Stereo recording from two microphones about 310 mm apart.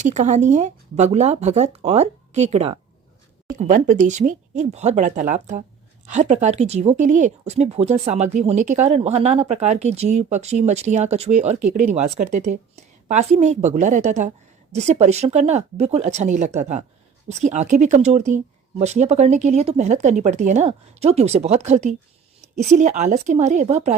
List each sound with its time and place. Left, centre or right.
0.0 s speech: right